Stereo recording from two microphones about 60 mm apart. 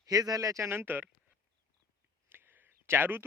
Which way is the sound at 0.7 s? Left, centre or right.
Right.